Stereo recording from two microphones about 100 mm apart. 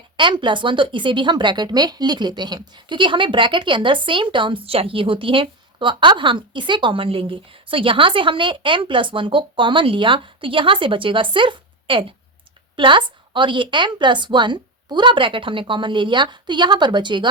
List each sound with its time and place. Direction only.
0.2 s a woman's voice: 55° right (ahead or behind)